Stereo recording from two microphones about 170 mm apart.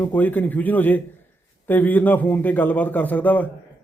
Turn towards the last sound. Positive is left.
turn(degrees=10)  # may be behind; listen again after turning